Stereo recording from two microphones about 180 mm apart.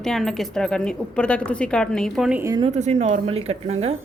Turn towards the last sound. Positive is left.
turn(degrees=-35)  # may be behind; listen again after turning